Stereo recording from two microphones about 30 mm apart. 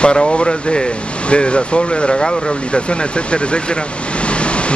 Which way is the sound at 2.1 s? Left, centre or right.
Left.